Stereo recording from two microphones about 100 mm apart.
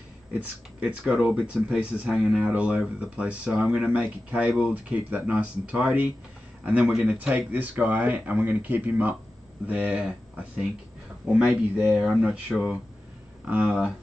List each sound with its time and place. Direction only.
0.3 s speech: 15° right (ahead or behind)